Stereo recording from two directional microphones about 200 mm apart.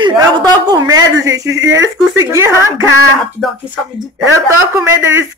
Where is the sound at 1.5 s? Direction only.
65° right (ahead or behind).